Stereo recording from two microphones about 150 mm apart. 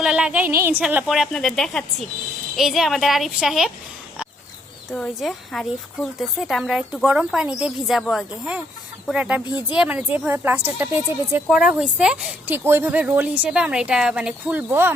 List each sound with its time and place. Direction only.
0.0 s a woman's voice: 5° right (ahead or behind)
4.9 s a woman's voice: centre (ahead or behind)
9.4 s speech: 30° left (ahead or behind)
9.7 s speech: 10° right (ahead or behind)
11.4 s speech: 5° right (ahead or behind)